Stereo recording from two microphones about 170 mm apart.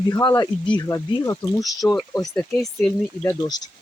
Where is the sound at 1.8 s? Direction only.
Centre (ahead or behind).